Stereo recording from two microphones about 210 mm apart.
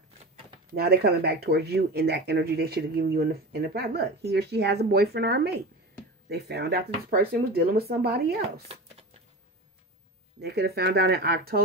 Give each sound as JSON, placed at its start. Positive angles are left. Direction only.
{"t": 0.7, "sound": "speech", "side_deg": -45}
{"t": 10.4, "sound": "speech", "side_deg": -50}